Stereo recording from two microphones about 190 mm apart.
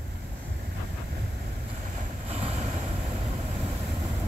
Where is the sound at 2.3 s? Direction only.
30° right (ahead or behind).